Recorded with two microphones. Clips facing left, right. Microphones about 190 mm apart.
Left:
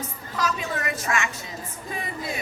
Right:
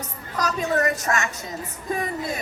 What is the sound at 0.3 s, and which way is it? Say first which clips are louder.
A woman's voice: right 5 dB; 40° right (ahead or behind).